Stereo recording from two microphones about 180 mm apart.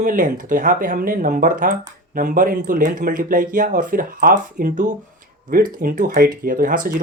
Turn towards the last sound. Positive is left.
turn(degrees=-50)  # may be behind; listen again after turning